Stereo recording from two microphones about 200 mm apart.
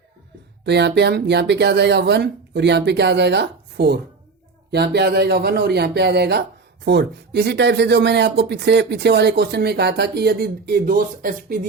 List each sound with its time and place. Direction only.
0.6 s speech: 55° right (ahead or behind)